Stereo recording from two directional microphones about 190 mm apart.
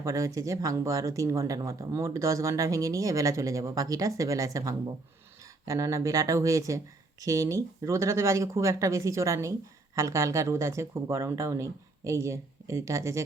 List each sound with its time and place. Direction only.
0.0 s speech: 15° right (ahead or behind)